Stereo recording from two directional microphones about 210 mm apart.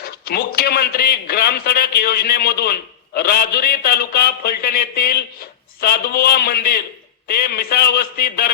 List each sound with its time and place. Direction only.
0.0 s a man's voice: 45° left (ahead or behind)